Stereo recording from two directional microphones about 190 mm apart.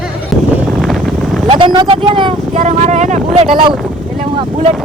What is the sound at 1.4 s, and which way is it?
Speech, 25° right (ahead or behind).